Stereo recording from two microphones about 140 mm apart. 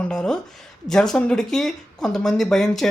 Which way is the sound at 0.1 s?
5° left (ahead or behind).